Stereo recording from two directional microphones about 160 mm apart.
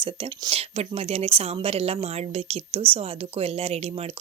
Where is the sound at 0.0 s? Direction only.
35° right (ahead or behind).